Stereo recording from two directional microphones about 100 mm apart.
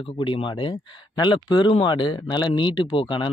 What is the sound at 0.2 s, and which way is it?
Speech, 55° left (ahead or behind).